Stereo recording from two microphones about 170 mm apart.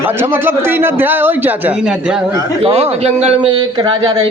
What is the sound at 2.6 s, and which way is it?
Speech, 35° right (ahead or behind).